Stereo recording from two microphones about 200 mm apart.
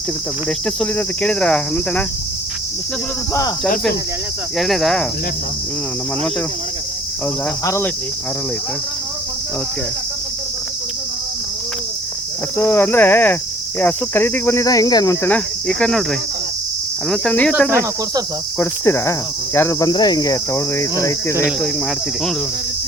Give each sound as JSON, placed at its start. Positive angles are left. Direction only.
{"t": 0.8, "sound": "cricket", "side_deg": 5}
{"t": 4.5, "sound": "cricket", "side_deg": 0}
{"t": 7.6, "sound": "cricket", "side_deg": 15}
{"t": 12.5, "sound": "cricket", "side_deg": 10}
{"t": 17.1, "sound": "cricket", "side_deg": 5}
{"t": 17.5, "sound": "cricket", "side_deg": -5}
{"t": 18.6, "sound": "cricket", "side_deg": 10}